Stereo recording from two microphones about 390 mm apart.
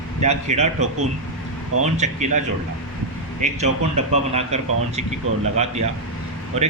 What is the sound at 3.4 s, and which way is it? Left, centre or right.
Speech, centre.